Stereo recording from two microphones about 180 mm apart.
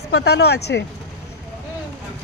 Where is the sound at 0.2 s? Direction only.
65° left (ahead or behind).